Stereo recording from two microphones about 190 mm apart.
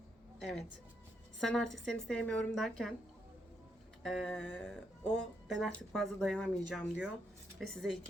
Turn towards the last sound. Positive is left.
turn(degrees=0)  # may be behind; listen again after turning